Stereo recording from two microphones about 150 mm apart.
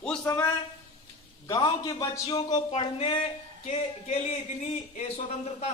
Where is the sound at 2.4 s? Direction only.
35° left (ahead or behind).